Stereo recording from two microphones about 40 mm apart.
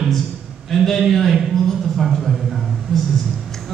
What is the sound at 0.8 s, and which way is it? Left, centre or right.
Speech, centre.